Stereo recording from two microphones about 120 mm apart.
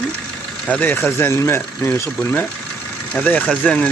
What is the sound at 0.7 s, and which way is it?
Speech, 15° left (ahead or behind).